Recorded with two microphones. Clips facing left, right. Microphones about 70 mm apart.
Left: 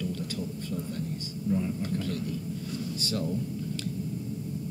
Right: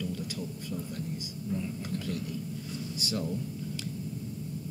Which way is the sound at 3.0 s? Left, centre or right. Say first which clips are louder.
Even; centre.